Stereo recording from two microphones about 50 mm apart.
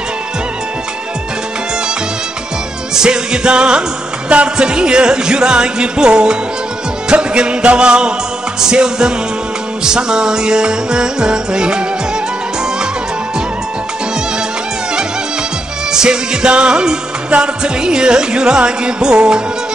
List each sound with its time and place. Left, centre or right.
2.9 s music: centre
15.9 s music: centre